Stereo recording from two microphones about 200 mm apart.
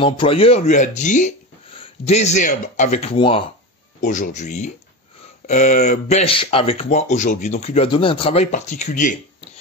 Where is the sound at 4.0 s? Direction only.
40° left (ahead or behind).